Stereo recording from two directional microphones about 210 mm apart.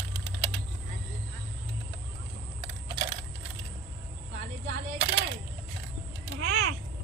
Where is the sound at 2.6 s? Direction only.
20° right (ahead or behind).